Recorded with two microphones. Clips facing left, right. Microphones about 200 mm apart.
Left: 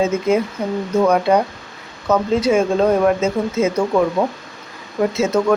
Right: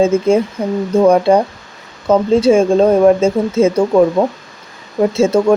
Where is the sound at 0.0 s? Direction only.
30° right (ahead or behind).